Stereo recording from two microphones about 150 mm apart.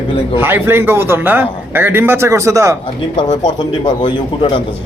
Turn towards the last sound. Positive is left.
turn(degrees=30)  # may be behind; listen again after turning